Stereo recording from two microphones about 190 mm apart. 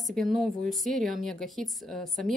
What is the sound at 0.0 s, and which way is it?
Speech, centre (ahead or behind).